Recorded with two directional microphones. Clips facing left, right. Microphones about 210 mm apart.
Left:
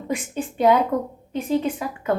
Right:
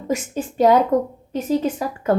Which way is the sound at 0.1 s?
40° right (ahead or behind).